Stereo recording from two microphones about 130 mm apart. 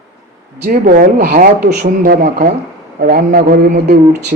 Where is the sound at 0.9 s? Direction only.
90° right.